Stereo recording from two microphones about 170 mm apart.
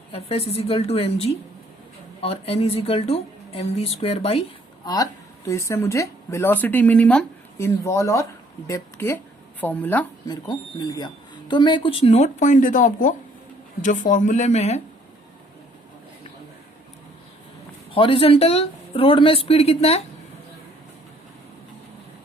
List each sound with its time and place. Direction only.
0.1 s speech: 35° left (ahead or behind)
5.5 s speech: 15° left (ahead or behind)
10.5 s speech: 25° left (ahead or behind); by 14.8 s 40° left (ahead or behind)
17.9 s speech: 30° left (ahead or behind)